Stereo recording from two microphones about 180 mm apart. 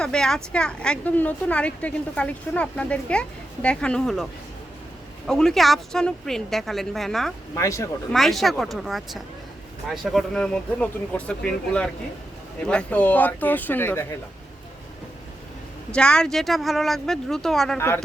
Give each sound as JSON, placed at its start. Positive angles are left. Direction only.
{"t": 0.0, "sound": "a woman's voice", "side_deg": 5}
{"t": 7.5, "sound": "speech", "side_deg": 15}
{"t": 8.1, "sound": "a woman's voice", "side_deg": 0}
{"t": 15.9, "sound": "a woman's voice", "side_deg": 5}
{"t": 17.7, "sound": "speech", "side_deg": 15}